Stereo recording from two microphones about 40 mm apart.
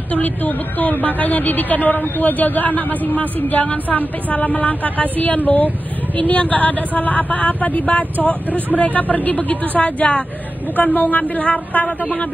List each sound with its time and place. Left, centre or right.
0.1 s a woman's voice: left